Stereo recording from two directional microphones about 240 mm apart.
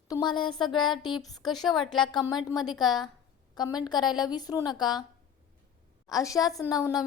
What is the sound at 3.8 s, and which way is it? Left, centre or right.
A woman's voice, centre.